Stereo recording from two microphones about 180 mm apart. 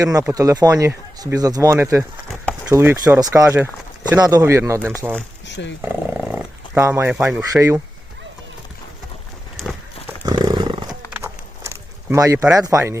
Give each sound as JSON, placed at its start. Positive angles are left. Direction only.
{"t": 0.0, "sound": "speech", "side_deg": -20}
{"t": 5.5, "sound": "speech", "side_deg": 80}
{"t": 5.8, "sound": "speech", "side_deg": -10}
{"t": 10.2, "sound": "roaring cats", "side_deg": -25}
{"t": 11.2, "sound": "horse", "side_deg": -15}
{"t": 12.1, "sound": "speech", "side_deg": -15}